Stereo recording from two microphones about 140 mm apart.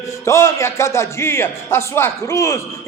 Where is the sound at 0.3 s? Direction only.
20° left (ahead or behind).